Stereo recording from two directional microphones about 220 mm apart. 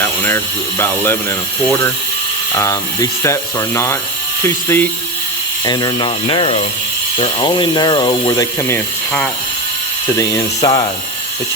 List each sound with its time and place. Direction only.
0.2 s speech: 10° left (ahead or behind)
2.6 s speech: 15° left (ahead or behind)
4.4 s speech: 10° left (ahead or behind)